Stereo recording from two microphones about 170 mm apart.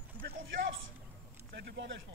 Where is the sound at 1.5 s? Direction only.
70° right (ahead or behind).